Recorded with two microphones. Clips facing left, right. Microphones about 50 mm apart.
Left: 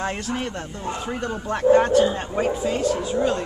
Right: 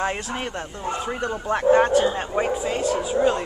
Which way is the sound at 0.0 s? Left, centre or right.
Centre.